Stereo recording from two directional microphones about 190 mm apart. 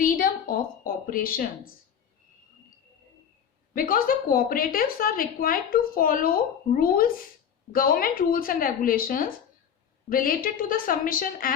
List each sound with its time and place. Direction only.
0.0 s a sound: 50° left (ahead or behind)
1.0 s a woman's voice: 50° left (ahead or behind)
3.8 s a woman's voice: 50° left (ahead or behind)